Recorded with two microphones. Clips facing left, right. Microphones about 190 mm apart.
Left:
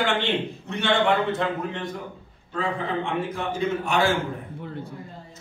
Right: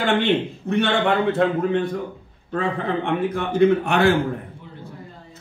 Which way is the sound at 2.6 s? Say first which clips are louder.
Right 3 dB; 60° right (ahead or behind).